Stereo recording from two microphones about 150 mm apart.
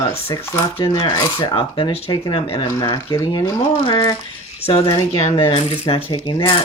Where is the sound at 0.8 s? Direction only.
30° left (ahead or behind).